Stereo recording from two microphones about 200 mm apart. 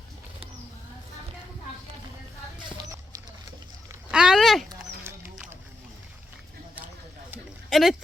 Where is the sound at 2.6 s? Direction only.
15° right (ahead or behind).